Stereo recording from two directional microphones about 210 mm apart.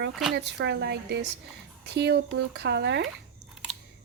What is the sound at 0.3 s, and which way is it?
A woman's voice, 55° right (ahead or behind).